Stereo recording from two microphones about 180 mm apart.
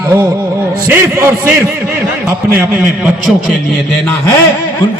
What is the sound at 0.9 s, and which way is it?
Speech, 15° right (ahead or behind).